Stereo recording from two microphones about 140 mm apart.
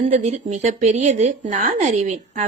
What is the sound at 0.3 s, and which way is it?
A woman's voice, 55° right (ahead or behind).